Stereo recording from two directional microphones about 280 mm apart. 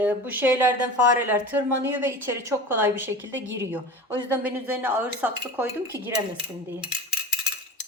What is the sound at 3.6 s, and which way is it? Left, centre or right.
A woman's voice, centre.